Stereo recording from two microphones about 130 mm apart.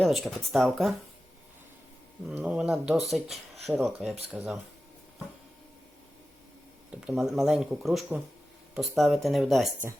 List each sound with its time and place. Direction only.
0.0 s speech: centre (ahead or behind)
2.3 s speech: 10° right (ahead or behind)
6.9 s speech: 5° right (ahead or behind)